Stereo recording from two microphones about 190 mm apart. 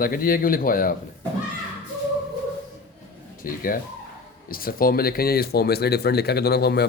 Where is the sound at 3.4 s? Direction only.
50° left (ahead or behind).